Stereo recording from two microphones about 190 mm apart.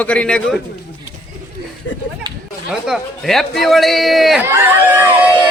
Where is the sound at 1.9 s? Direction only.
75° left (ahead or behind).